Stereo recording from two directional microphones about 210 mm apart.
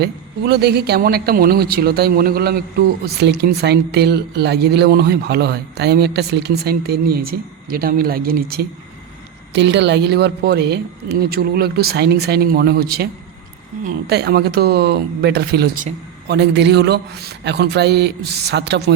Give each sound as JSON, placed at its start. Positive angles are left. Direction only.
{"t": 0.0, "sound": "speech", "side_deg": -50}